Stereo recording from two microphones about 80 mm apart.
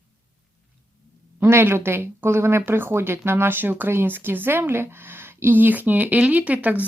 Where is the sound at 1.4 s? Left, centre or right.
Right.